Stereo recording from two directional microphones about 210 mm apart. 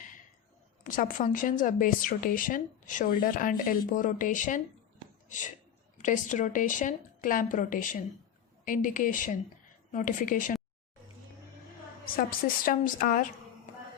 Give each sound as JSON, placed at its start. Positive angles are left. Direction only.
{"t": 0.9, "sound": "a woman's voice", "side_deg": 40}
{"t": 6.0, "sound": "a woman's voice", "side_deg": 35}
{"t": 12.6, "sound": "a woman's voice", "side_deg": 40}